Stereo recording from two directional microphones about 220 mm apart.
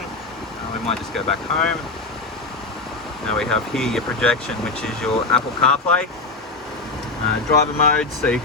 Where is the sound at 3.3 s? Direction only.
Centre (ahead or behind).